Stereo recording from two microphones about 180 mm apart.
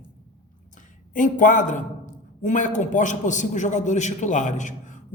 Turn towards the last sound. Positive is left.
turn(degrees=45)  # may be behind; listen again after turning